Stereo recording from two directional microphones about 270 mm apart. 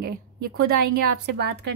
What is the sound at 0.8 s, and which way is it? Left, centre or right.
Speech, right.